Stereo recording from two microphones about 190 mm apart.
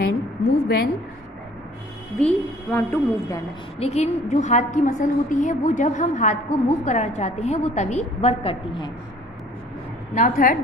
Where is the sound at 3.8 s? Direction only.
35° left (ahead or behind).